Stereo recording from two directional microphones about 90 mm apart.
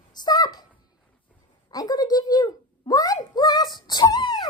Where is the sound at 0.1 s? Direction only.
50° left (ahead or behind).